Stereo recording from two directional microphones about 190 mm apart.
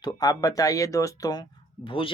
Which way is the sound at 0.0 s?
20° left (ahead or behind).